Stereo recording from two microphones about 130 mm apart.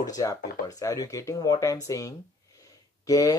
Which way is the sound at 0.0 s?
25° left (ahead or behind).